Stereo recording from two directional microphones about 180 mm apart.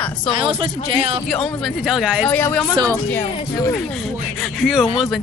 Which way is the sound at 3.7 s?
Centre (ahead or behind).